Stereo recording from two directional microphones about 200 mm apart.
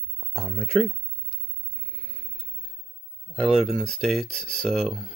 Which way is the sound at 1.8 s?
5° left (ahead or behind).